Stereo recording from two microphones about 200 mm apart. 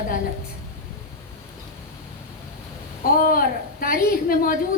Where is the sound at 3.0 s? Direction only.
45° left (ahead or behind).